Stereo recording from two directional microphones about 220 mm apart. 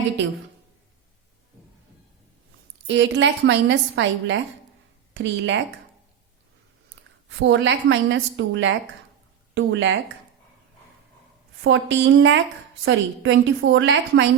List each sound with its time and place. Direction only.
2.8 s a woman's voice: 55° right (ahead or behind)
7.3 s a woman's voice: 55° right (ahead or behind)
11.6 s a woman's voice: 60° right (ahead or behind)